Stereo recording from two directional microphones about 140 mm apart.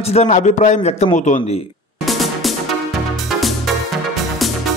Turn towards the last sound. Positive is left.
turn(degrees=0)  # may be behind; listen again after turning